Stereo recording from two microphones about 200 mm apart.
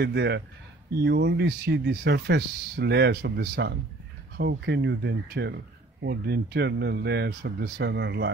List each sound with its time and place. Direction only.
0.0 s speech: 60° right (ahead or behind)